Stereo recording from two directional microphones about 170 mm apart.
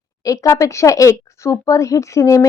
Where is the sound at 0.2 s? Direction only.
20° left (ahead or behind).